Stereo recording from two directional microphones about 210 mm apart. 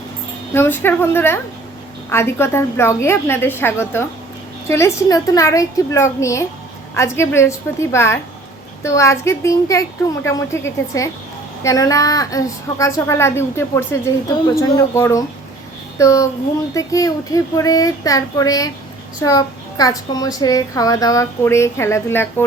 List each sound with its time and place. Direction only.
0.5 s a child's voice: 10° left (ahead or behind)